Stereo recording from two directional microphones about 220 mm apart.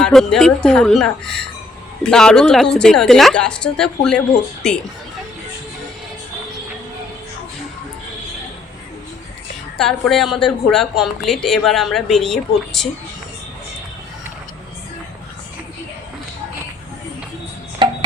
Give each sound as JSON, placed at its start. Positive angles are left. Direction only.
{"t": 0.0, "sound": "a woman's voice", "side_deg": 0}
{"t": 9.7, "sound": "a woman's voice", "side_deg": 0}
{"t": 17.8, "sound": "music", "side_deg": -20}